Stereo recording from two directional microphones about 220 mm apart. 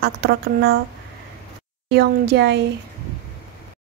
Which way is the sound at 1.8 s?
50° right (ahead or behind).